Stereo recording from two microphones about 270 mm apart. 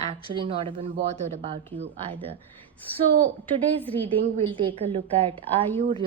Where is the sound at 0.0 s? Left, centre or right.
Right.